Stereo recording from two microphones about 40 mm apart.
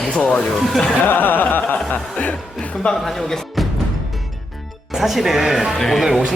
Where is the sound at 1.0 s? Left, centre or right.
Left.